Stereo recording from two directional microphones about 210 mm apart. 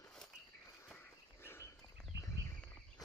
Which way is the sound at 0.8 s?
10° left (ahead or behind).